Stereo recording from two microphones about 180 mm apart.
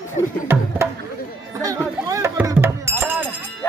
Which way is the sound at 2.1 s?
15° right (ahead or behind).